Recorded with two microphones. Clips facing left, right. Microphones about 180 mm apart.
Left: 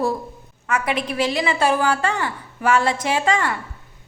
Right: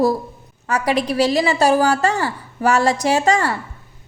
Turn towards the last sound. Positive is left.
turn(degrees=-40)  # may be behind; listen again after turning